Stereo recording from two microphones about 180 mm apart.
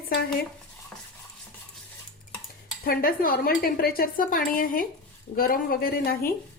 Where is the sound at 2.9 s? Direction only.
55° left (ahead or behind).